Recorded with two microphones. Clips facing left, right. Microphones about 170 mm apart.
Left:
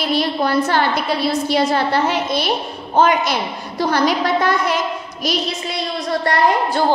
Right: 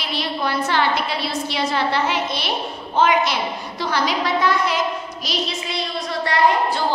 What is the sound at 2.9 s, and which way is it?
A woman's voice, 45° left (ahead or behind).